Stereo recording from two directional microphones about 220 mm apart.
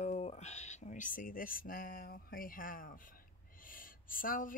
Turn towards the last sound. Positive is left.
turn(degrees=40)  # may be behind; listen again after turning